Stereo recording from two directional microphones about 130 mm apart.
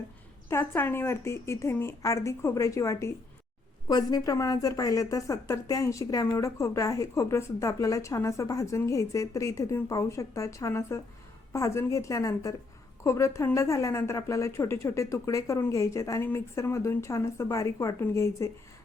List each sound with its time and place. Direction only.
0.5 s a woman's voice: 15° left (ahead or behind)